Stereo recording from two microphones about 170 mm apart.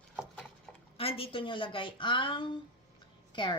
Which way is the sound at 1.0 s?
35° left (ahead or behind).